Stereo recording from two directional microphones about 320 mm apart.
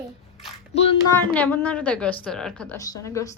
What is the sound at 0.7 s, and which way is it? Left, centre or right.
Speech, centre.